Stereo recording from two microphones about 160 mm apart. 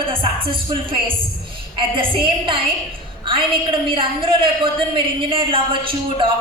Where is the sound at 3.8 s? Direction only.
30° right (ahead or behind).